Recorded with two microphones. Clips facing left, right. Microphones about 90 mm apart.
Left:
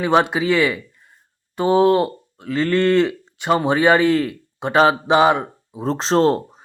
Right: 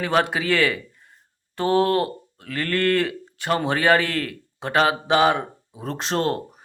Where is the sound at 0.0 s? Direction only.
20° left (ahead or behind).